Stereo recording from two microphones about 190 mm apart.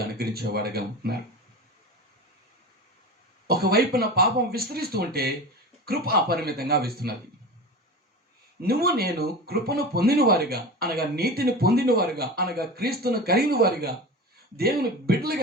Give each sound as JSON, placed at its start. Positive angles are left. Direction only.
{"t": 0.0, "sound": "speech", "side_deg": -55}
{"t": 3.4, "sound": "speech", "side_deg": -55}
{"t": 8.6, "sound": "speech", "side_deg": -55}